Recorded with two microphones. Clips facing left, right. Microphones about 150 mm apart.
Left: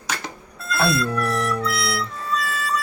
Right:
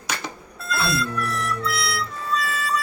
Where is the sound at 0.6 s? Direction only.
Centre (ahead or behind).